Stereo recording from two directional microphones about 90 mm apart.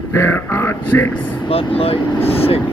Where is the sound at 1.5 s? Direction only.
90° left.